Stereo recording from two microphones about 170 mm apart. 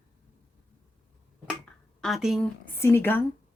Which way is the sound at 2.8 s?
15° left (ahead or behind).